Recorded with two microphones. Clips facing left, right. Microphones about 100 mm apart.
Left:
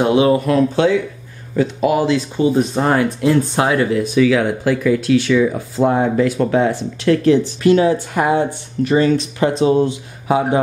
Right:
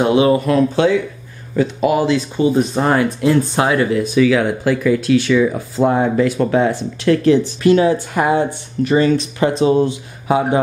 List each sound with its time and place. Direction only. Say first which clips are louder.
0.0 s speech: even; 10° right (ahead or behind)